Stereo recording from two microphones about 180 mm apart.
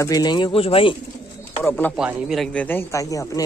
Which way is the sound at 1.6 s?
10° left (ahead or behind).